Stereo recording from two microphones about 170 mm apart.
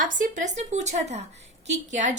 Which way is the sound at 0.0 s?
50° right (ahead or behind).